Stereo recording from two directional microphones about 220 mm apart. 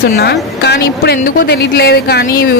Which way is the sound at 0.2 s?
50° left (ahead or behind).